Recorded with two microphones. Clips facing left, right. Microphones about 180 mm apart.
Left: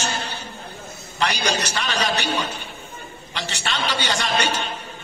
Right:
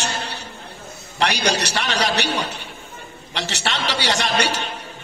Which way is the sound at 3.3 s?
75° right (ahead or behind).